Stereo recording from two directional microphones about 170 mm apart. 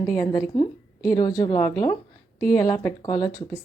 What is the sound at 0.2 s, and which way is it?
Speech, 15° left (ahead or behind).